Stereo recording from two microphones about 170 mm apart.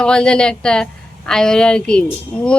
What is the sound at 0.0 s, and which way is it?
Speech, 5° left (ahead or behind).